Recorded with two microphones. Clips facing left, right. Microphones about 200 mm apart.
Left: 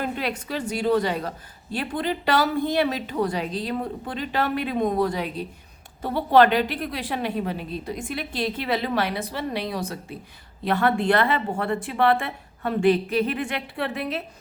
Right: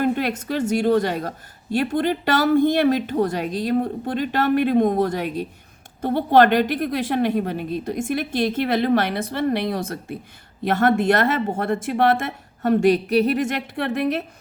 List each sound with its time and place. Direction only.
0.0 s a woman's voice: 50° right (ahead or behind)
13.4 s a woman's voice: 50° right (ahead or behind)